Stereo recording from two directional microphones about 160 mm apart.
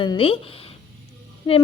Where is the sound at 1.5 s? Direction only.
30° left (ahead or behind).